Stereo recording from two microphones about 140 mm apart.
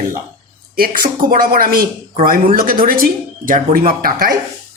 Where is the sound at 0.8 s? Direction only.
90° right.